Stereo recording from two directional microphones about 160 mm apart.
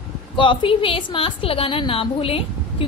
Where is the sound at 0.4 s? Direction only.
30° left (ahead or behind).